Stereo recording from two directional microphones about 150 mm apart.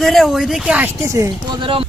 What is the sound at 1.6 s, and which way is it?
Speech, 35° right (ahead or behind).